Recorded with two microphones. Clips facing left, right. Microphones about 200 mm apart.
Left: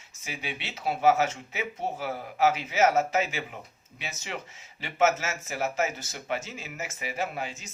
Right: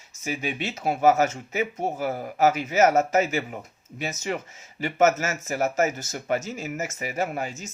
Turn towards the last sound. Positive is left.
turn(degrees=-45)  # may be behind; listen again after turning